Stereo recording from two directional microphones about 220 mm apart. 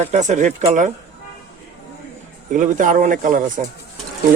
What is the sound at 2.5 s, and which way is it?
Speech, 35° right (ahead or behind).